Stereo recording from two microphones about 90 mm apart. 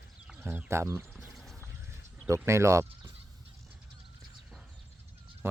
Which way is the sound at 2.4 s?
30° right (ahead or behind).